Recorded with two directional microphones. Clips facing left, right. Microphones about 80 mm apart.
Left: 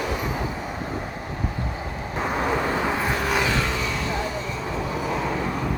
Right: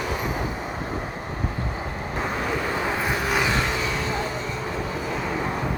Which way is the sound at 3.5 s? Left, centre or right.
Right.